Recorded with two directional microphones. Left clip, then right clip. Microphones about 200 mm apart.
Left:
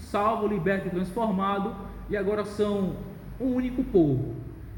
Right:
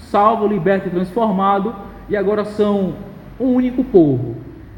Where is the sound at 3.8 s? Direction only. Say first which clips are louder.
Right 10 dB; 45° right (ahead or behind).